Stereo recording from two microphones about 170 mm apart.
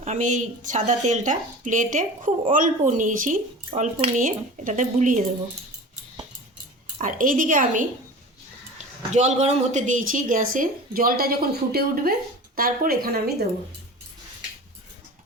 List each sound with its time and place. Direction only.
0.0 s speech: 45° right (ahead or behind)
7.0 s speech: 50° right (ahead or behind)
9.1 s speech: 40° right (ahead or behind); by 13.3 s 60° right (ahead or behind)